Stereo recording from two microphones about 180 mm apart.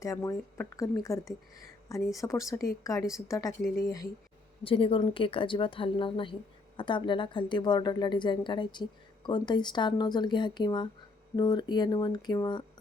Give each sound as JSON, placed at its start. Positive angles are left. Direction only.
{"t": 0.0, "sound": "a woman's voice", "side_deg": 20}
{"t": 4.6, "sound": "a woman's voice", "side_deg": 30}